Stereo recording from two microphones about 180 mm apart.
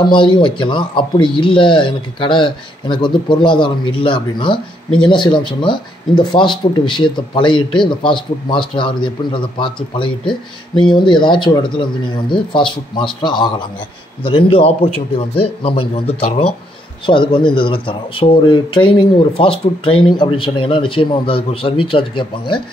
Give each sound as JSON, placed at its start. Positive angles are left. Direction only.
{"t": 0.1, "sound": "a man's voice", "side_deg": 25}